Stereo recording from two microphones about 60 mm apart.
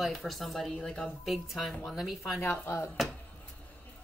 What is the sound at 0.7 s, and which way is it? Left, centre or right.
Speech, centre.